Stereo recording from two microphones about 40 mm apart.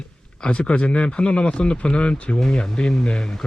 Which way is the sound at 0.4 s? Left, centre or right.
Left.